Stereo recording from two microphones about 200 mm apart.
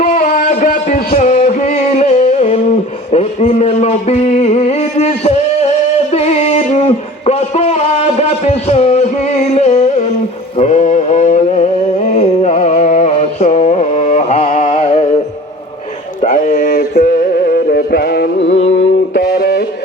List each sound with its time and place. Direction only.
0.0 s music: 40° left (ahead or behind)
3.1 s a sound: 30° left (ahead or behind)
10.6 s mantra: 35° left (ahead or behind)
12.1 s music: 30° left (ahead or behind)
16.2 s music: 40° left (ahead or behind); by 18.5 s 55° left (ahead or behind)
18.5 s mantra: 30° left (ahead or behind)
19.1 s music: 55° left (ahead or behind)